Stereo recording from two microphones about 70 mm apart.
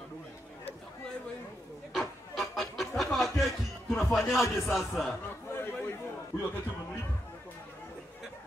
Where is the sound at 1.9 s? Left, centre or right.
Centre.